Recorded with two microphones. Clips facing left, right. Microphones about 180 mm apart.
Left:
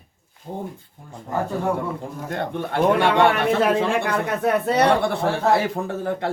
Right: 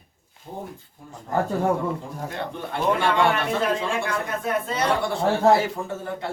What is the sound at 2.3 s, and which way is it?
A man's voice, 60° left (ahead or behind).